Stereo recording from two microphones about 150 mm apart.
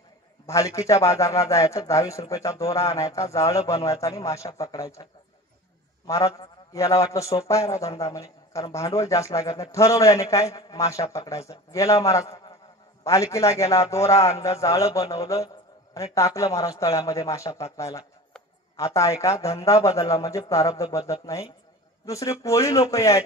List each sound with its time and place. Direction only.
0.5 s a man's voice: 20° left (ahead or behind)
6.0 s a man's voice: 20° left (ahead or behind)